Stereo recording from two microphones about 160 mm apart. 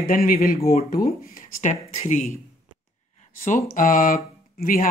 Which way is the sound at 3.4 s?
55° left (ahead or behind).